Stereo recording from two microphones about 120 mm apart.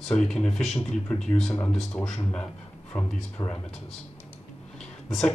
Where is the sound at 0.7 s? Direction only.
20° left (ahead or behind).